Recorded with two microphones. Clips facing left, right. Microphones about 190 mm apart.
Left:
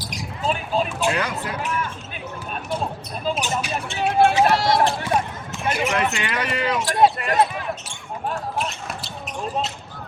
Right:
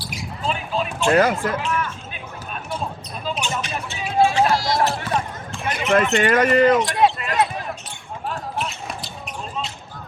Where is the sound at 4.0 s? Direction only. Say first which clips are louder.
Left 1 dB; 65° left (ahead or behind).